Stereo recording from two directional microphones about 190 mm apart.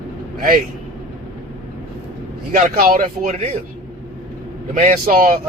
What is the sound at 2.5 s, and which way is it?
Speech, 45° right (ahead or behind).